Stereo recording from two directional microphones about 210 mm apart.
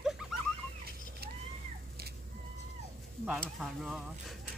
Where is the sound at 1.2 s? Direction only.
50° right (ahead or behind).